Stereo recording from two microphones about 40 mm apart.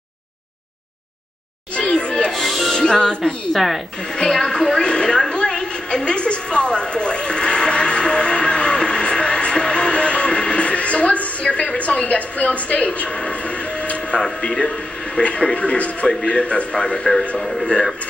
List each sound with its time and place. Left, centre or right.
1.8 s music: left
2.3 s speech: centre
2.7 s a man's voice: centre
3.5 s speech: centre
4.3 s a woman's voice: centre
5.3 s a sound: left
14.2 s a man's voice: left
17.4 s speech: centre